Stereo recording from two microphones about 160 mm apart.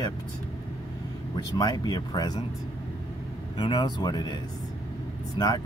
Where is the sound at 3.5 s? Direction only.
30° left (ahead or behind).